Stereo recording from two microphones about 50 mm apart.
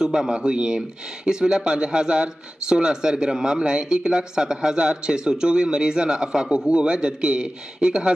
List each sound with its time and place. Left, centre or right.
0.0 s speech: centre